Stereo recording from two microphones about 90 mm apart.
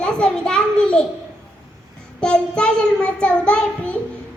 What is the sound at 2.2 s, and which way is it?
A child's voice, 10° left (ahead or behind).